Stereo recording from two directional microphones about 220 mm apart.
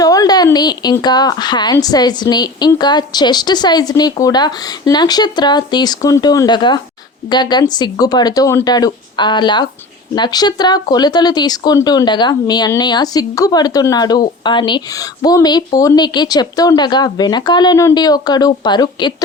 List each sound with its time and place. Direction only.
0.0 s a woman's voice: 15° left (ahead or behind)